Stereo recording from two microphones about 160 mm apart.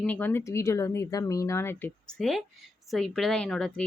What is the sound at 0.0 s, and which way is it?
Speech, 10° left (ahead or behind).